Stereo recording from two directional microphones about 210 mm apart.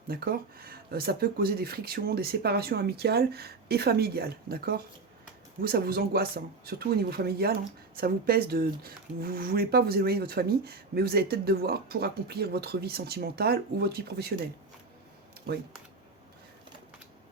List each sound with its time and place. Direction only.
0.1 s speech: 45° right (ahead or behind)